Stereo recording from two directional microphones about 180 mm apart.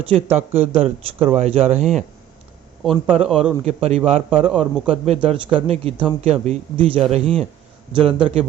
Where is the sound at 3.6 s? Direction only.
35° right (ahead or behind).